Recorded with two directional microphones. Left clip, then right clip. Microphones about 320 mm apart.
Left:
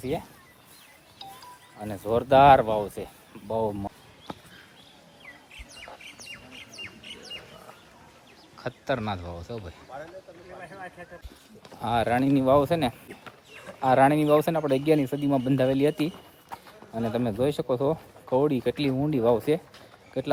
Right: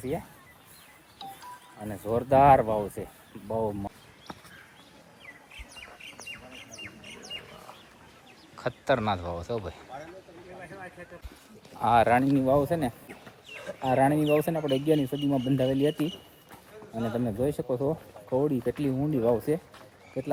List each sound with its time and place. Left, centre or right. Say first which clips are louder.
1.8 s speech: left 3 dB; centre
5.5 s bird: left 2 dB; left
8.5 s a man's voice: right 3 dB; centre
11.8 s speech: right 3 dB; centre